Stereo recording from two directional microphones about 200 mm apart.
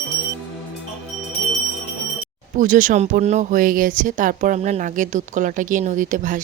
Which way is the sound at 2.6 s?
40° right (ahead or behind).